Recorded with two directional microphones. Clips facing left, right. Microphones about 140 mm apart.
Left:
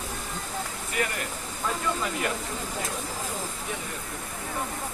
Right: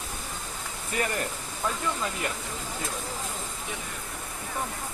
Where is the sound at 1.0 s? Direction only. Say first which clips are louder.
Even; 25° right (ahead or behind).